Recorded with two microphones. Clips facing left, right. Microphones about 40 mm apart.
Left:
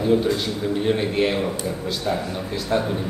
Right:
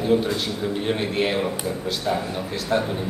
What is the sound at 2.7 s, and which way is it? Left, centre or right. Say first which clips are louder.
Speech: even; centre.